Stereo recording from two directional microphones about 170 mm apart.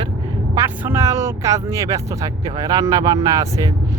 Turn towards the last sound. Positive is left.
turn(degrees=-20)  # may be behind; listen again after turning